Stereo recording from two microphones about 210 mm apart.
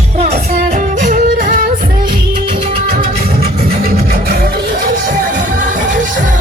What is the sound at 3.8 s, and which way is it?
Music, 45° right (ahead or behind).